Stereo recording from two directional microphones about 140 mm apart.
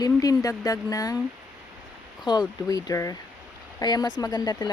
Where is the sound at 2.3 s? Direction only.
30° left (ahead or behind).